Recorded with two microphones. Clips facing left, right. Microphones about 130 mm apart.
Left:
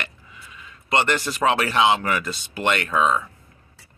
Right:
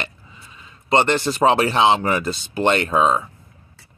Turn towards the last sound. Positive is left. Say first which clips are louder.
# right 3 dB
turn(degrees=-30)  # may be behind; listen again after turning